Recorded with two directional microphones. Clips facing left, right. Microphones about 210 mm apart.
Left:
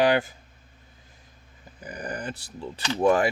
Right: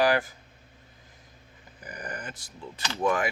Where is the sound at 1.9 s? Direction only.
30° left (ahead or behind).